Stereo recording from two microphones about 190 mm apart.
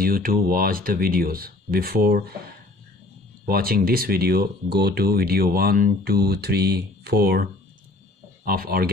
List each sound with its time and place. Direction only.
0.0 s speech: 50° right (ahead or behind)
8.5 s speech: 50° right (ahead or behind)